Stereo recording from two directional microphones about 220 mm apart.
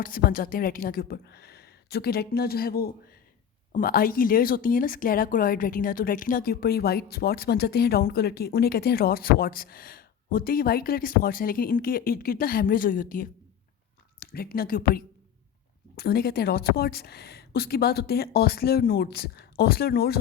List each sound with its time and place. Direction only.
0.0 s speech: 40° left (ahead or behind)